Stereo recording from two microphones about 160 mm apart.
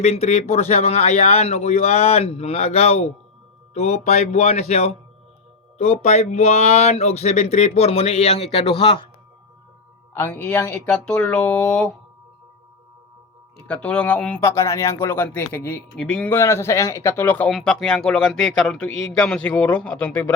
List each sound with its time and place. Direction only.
0.0 s speech: 40° left (ahead or behind)
10.2 s speech: 15° left (ahead or behind)
13.7 s speech: 10° left (ahead or behind)